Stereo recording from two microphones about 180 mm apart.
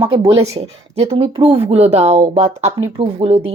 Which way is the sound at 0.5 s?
35° right (ahead or behind).